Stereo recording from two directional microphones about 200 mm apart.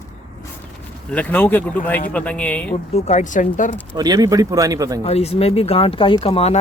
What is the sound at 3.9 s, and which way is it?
A man's voice, 20° right (ahead or behind).